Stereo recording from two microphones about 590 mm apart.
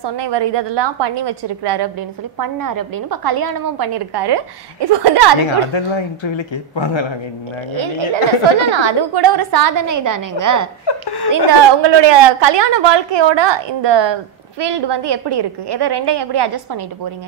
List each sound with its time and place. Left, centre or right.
0.0 s a woman's voice: right
5.7 s speech: left
7.7 s a woman's voice: right
10.9 s speech: left
11.3 s a woman's voice: right